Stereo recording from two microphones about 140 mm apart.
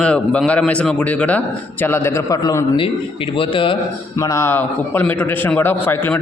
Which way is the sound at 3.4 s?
40° left (ahead or behind).